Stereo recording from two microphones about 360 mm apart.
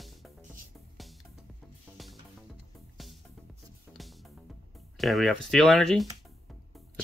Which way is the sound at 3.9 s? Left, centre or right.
Centre.